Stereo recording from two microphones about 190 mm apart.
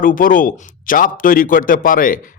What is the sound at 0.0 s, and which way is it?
Speech, 45° left (ahead or behind).